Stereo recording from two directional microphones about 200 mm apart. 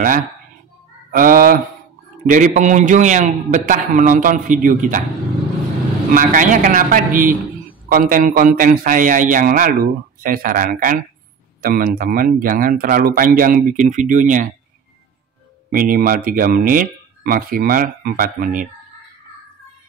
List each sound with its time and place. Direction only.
1.1 s a man's voice: 45° right (ahead or behind)
6.1 s a man's voice: 40° right (ahead or behind)
15.7 s a man's voice: 45° right (ahead or behind)